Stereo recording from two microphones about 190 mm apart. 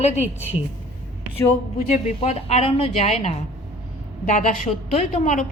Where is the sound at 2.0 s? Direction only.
35° left (ahead or behind).